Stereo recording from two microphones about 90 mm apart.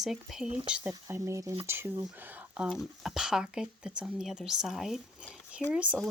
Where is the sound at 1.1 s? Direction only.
30° right (ahead or behind); by 2.7 s 15° right (ahead or behind).